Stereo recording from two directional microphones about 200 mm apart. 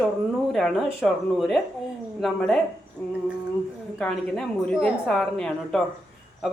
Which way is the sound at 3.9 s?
Centre (ahead or behind).